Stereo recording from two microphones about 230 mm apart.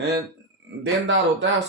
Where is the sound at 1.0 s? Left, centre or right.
Right.